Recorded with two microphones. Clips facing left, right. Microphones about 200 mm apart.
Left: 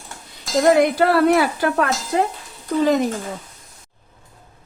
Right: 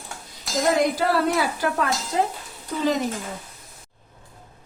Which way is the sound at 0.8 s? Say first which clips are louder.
Left 6 dB; 60° left (ahead or behind).